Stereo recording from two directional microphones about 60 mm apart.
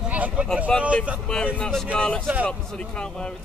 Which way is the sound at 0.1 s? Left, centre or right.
Right.